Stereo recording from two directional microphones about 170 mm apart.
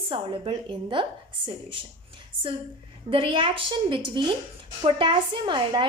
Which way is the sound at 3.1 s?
30° right (ahead or behind).